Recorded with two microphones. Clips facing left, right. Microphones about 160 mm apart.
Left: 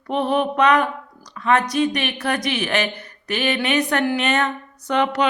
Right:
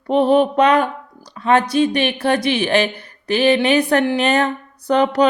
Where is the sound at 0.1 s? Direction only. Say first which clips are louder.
Right 6 dB; 30° right (ahead or behind).